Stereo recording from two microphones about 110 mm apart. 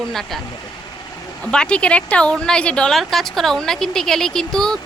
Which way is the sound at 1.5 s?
10° left (ahead or behind).